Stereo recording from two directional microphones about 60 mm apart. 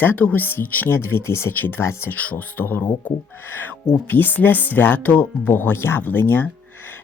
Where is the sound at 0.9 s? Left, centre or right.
Left.